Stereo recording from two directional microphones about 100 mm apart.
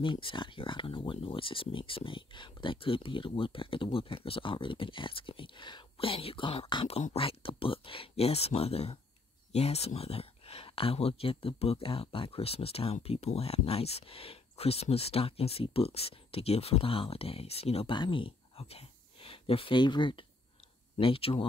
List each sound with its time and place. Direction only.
0.0 s speech: 55° left (ahead or behind)
6.9 s speech: 90° left
9.5 s speech: 90° left
17.9 s speech: 55° left (ahead or behind)
21.0 s speech: 65° left (ahead or behind)